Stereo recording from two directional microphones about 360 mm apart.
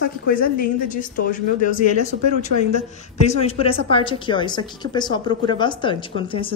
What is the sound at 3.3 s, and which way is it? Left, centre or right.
A woman's voice, centre.